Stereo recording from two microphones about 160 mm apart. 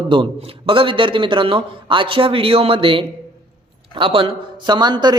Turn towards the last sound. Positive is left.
turn(degrees=-25)  # may be behind; listen again after turning